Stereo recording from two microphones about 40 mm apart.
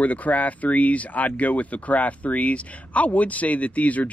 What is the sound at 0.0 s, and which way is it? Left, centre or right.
Speech, left.